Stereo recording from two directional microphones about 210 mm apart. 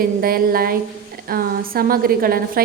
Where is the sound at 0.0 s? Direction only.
45° right (ahead or behind).